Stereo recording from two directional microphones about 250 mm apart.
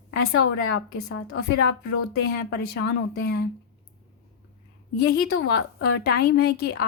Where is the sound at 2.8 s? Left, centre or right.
Left.